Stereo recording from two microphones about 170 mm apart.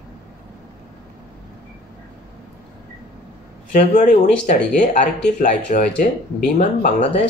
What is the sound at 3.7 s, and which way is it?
Speech, 50° left (ahead or behind).